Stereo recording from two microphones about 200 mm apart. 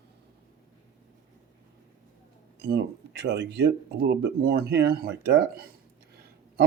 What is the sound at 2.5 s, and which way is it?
Speech, 55° right (ahead or behind).